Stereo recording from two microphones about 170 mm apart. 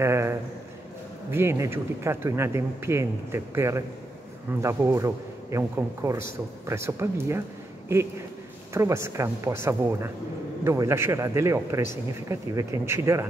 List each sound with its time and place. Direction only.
0.0 s a sound: 15° right (ahead or behind)
1.3 s a man's voice: 15° right (ahead or behind)
8.7 s a man's voice: 15° right (ahead or behind)